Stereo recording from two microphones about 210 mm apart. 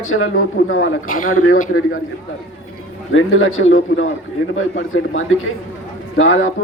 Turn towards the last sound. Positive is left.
turn(degrees=70)  # may be behind; listen again after turning